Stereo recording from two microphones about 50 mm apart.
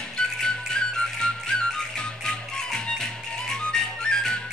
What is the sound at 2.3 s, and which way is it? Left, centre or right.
Music, centre.